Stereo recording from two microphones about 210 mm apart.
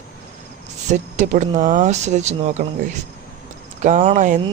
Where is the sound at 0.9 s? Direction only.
35° right (ahead or behind).